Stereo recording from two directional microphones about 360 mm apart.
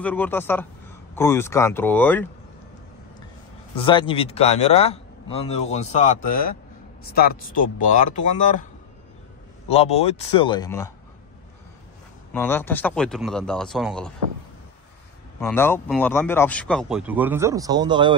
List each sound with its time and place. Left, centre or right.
0.0 s a man's voice: centre
3.7 s a man's voice: centre
9.7 s a man's voice: centre
12.3 s speech: centre
15.4 s speech: centre